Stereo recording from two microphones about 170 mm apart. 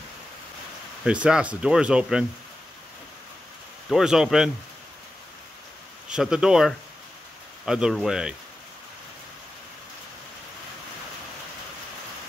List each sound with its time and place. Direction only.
1.0 s speech: 5° right (ahead or behind)
3.9 s speech: 5° right (ahead or behind)
6.0 s speech: 5° right (ahead or behind)